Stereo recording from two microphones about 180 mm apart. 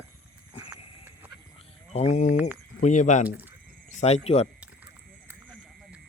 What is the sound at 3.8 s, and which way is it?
Speech, 40° left (ahead or behind).